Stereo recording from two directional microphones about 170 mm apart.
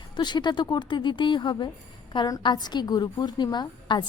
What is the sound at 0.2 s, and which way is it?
A woman's voice, 25° left (ahead or behind).